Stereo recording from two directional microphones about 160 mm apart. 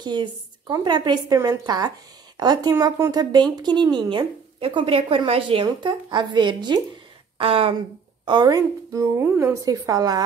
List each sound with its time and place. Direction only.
0.0 s a woman's voice: 25° right (ahead or behind)